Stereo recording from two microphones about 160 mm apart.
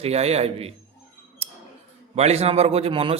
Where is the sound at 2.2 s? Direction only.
40° right (ahead or behind).